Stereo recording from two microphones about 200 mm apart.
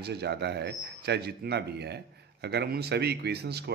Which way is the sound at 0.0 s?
55° right (ahead or behind).